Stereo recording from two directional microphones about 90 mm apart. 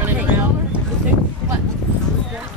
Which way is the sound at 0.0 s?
20° right (ahead or behind).